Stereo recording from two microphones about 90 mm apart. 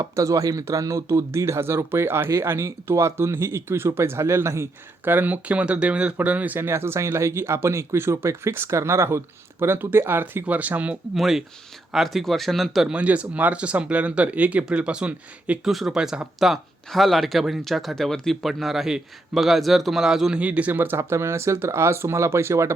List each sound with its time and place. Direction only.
0.0 s speech: 40° right (ahead or behind); by 10.9 s 15° right (ahead or behind)
11.1 s speech: 5° right (ahead or behind)
12.9 s speech: 15° right (ahead or behind)
20.4 s speech: 15° right (ahead or behind); by 22.7 s 30° right (ahead or behind)